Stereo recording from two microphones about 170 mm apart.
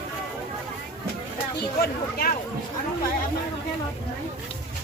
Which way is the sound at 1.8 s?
65° left (ahead or behind).